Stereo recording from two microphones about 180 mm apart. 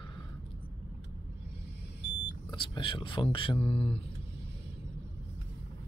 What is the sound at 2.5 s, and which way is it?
Speech, 30° left (ahead or behind).